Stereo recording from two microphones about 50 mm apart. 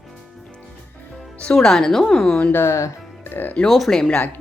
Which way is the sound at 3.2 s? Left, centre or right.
Left.